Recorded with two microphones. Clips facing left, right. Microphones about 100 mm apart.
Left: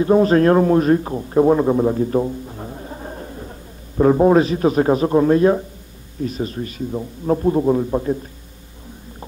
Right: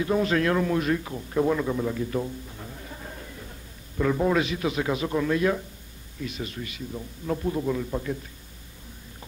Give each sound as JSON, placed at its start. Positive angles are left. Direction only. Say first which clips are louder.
{"t": 0.0, "sound": "a man's voice", "louder": "left 10 dB", "side_deg": 35}